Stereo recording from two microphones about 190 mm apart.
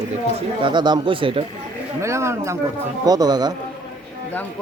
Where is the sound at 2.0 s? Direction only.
15° right (ahead or behind).